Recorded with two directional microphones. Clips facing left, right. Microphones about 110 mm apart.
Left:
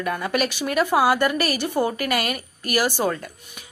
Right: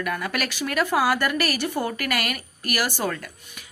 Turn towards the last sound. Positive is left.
turn(degrees=20)  # may be behind; listen again after turning